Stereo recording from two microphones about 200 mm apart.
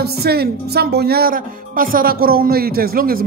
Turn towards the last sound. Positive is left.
turn(degrees=-45)  # may be behind; listen again after turning